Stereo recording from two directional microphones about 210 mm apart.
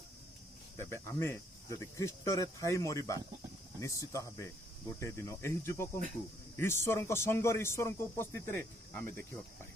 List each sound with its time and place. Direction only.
0.8 s speech: 10° left (ahead or behind)